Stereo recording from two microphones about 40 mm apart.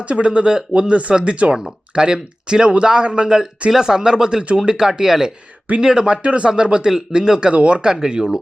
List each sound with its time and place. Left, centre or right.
0.0 s speech: right
6.2 s speech: right
7.5 s speech: right
8.0 s speech: centre